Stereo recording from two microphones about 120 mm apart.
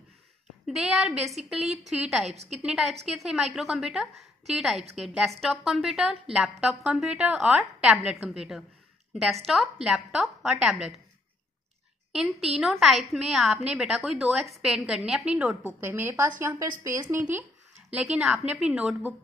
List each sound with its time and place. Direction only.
0.7 s a woman's voice: 5° right (ahead or behind)
2.2 s a woman's voice: 60° right (ahead or behind)
2.5 s a woman's voice: centre (ahead or behind)
12.1 s a woman's voice: 5° right (ahead or behind); by 17.2 s 25° right (ahead or behind)
17.9 s a woman's voice: 5° right (ahead or behind)